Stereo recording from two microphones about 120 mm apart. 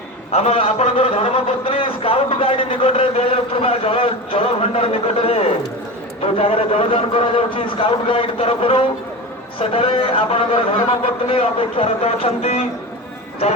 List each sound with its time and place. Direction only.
0.3 s a man's voice: 60° left (ahead or behind)